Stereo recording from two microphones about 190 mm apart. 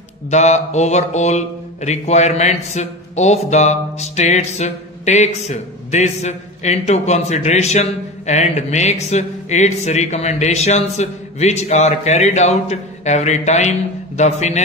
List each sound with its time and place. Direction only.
0.3 s speech: 35° left (ahead or behind)